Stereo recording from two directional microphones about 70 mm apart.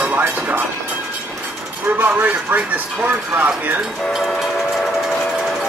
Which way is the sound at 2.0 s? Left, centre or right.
Right.